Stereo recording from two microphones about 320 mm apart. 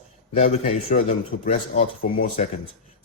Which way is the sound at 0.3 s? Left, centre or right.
Left.